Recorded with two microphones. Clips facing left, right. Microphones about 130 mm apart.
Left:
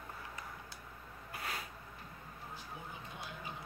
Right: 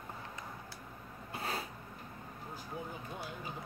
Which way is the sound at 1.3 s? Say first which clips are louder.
Right 5 dB; 30° right (ahead or behind).